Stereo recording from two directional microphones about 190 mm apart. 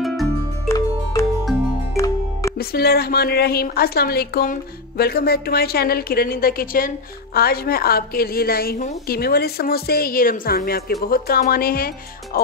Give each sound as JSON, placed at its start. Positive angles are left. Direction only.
{"t": 0.7, "sound": "music", "side_deg": 15}
{"t": 2.6, "sound": "a woman's voice", "side_deg": 55}